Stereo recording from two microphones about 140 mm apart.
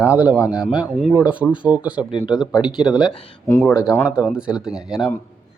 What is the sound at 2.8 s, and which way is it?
Speech, 5° right (ahead or behind).